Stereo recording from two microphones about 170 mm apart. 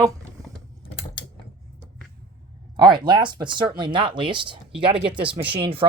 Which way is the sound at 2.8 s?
25° right (ahead or behind).